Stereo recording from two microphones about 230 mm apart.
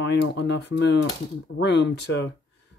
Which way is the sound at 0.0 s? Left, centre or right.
Left.